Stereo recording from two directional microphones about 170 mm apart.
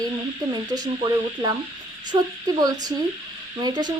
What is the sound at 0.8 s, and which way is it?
Speech, 25° right (ahead or behind).